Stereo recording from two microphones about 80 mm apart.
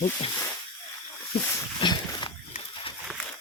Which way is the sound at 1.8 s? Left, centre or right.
Left.